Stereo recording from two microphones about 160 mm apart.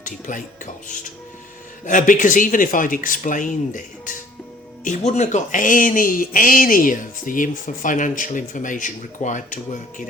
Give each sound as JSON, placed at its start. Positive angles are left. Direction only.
{"t": 0.0, "sound": "speech", "side_deg": 55}
{"t": 1.8, "sound": "speech", "side_deg": 55}